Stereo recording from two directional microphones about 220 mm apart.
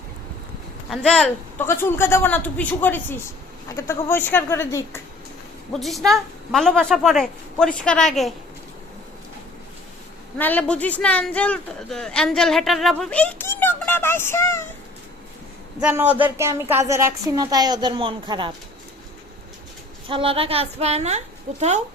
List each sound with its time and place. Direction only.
0.9 s a man's voice: centre (ahead or behind)
5.8 s speech: centre (ahead or behind)
10.3 s speech: 10° left (ahead or behind)
15.8 s a woman's voice: 5° right (ahead or behind); by 18.5 s 20° right (ahead or behind)
20.1 s a woman's voice: 25° right (ahead or behind)